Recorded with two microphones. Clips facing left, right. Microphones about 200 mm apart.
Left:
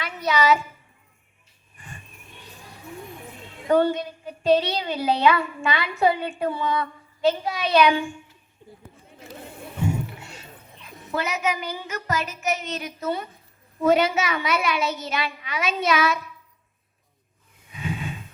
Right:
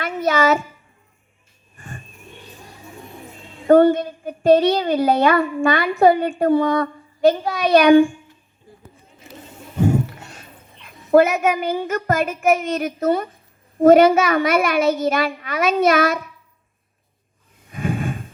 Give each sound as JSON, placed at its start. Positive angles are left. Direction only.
{"t": 0.0, "sound": "a woman's voice", "side_deg": -50}
{"t": 1.7, "sound": "a sound", "side_deg": -50}
{"t": 3.7, "sound": "a woman's voice", "side_deg": -50}
{"t": 9.8, "sound": "a sound", "side_deg": -60}
{"t": 10.8, "sound": "a woman's voice", "side_deg": -50}
{"t": 17.7, "sound": "snort", "side_deg": -50}